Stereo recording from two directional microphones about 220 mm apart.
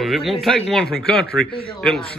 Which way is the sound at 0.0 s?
Centre (ahead or behind).